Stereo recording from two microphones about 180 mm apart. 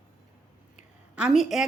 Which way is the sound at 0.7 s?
5° right (ahead or behind).